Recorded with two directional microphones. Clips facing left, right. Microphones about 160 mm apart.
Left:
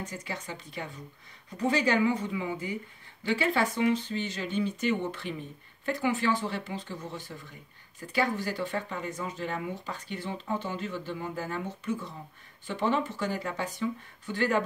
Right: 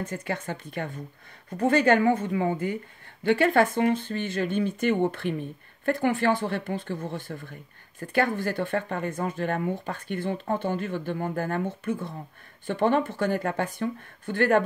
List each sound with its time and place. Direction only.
0.0 s speech: 55° right (ahead or behind)